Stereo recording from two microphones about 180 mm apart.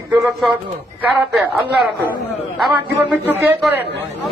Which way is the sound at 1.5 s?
Centre (ahead or behind).